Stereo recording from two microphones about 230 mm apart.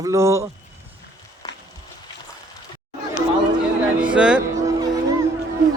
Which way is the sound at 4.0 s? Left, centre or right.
Centre.